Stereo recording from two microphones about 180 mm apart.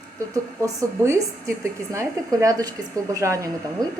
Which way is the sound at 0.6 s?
20° right (ahead or behind).